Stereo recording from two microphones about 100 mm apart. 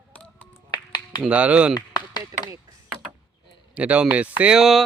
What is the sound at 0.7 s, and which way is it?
Finger snapping, 45° left (ahead or behind).